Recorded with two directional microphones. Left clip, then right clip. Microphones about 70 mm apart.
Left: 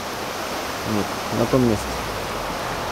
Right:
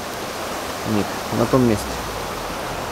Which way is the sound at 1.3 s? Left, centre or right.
Right.